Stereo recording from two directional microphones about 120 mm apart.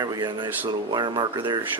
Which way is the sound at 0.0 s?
35° right (ahead or behind).